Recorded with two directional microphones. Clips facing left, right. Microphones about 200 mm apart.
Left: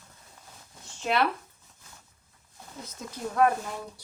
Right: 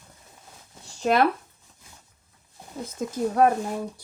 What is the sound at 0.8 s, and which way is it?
Zipper, 40° right (ahead or behind).